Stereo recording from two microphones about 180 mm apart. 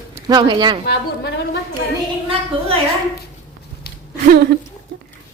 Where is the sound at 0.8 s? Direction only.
65° left (ahead or behind).